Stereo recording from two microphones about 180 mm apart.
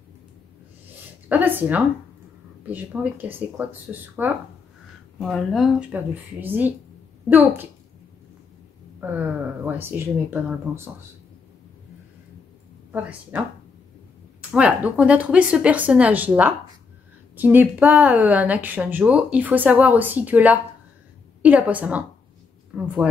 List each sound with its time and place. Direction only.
1.3 s speech: 10° right (ahead or behind)
9.0 s speech: 10° right (ahead or behind)
12.9 s speech: 10° right (ahead or behind)
14.5 s speech: 5° right (ahead or behind)